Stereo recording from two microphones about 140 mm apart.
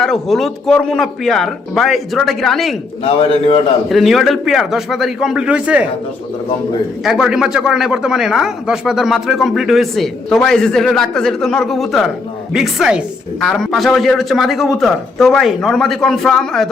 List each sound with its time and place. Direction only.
0.0 s speech: centre (ahead or behind)
3.0 s a man's voice: 40° left (ahead or behind)
3.8 s speech: centre (ahead or behind)
7.0 s speech: 5° right (ahead or behind)